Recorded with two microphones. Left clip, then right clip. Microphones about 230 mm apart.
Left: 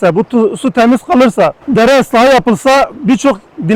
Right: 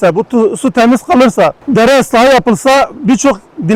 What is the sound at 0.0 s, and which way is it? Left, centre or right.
Speech, right.